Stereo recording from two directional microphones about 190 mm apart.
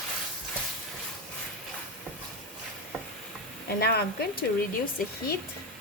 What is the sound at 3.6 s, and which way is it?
Speech, 55° left (ahead or behind).